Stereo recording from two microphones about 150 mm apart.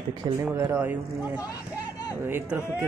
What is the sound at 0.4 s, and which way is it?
A man's voice, 15° right (ahead or behind).